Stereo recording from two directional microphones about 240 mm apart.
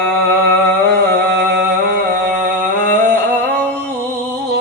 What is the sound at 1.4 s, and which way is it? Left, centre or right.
Music, right.